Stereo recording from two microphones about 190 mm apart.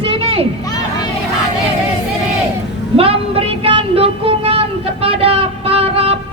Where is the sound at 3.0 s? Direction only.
30° right (ahead or behind).